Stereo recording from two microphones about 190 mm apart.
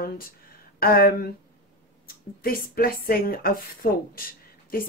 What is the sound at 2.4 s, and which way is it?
Speech, 50° left (ahead or behind).